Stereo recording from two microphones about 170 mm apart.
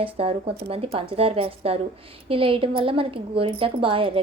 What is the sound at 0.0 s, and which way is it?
A woman's voice, 35° right (ahead or behind).